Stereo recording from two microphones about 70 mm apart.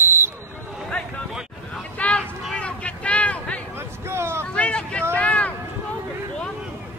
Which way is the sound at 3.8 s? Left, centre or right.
Right.